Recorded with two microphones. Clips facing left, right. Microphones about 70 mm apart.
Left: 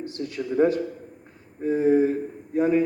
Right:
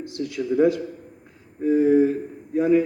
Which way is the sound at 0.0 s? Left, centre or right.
Left.